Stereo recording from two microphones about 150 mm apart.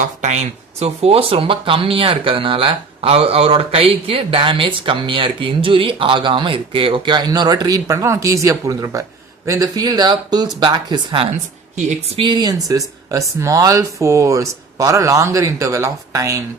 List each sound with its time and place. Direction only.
0.2 s speech: 50° right (ahead or behind); by 11.3 s 30° right (ahead or behind)
11.8 s speech: 50° right (ahead or behind)
12.2 s speech: 30° right (ahead or behind)